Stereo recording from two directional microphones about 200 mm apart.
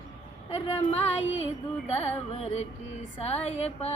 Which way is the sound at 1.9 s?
30° left (ahead or behind).